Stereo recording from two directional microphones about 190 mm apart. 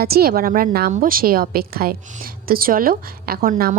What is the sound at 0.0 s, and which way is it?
A woman's voice, 55° right (ahead or behind).